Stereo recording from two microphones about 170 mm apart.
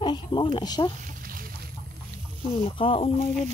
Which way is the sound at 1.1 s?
55° right (ahead or behind).